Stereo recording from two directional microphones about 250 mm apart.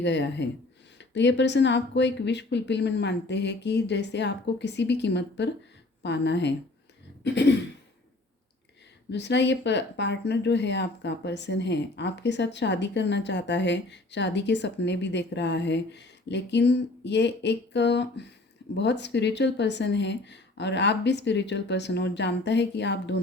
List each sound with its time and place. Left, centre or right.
0.0 s speech: left
9.0 s speech: left